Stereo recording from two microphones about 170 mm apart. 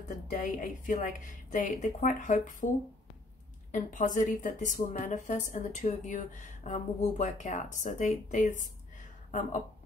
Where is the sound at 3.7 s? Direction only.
50° left (ahead or behind).